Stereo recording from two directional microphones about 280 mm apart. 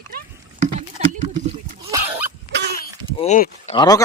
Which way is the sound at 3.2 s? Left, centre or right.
Left.